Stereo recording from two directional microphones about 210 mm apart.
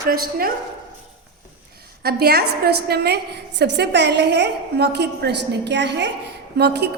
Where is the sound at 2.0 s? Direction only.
50° right (ahead or behind).